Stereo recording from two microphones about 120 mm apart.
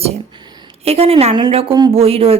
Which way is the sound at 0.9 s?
55° right (ahead or behind).